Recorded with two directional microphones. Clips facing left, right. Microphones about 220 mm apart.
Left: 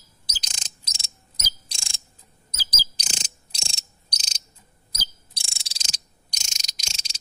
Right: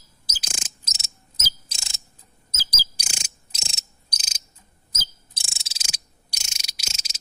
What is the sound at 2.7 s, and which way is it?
Insect, 10° right (ahead or behind).